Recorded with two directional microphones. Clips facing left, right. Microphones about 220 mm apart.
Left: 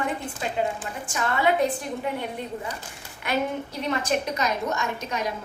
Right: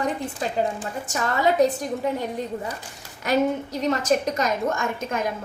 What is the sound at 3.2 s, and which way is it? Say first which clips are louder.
A woman's voice: right 5 dB; 40° right (ahead or behind).